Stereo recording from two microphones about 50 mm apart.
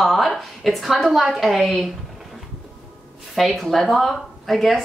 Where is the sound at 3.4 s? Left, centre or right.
Centre.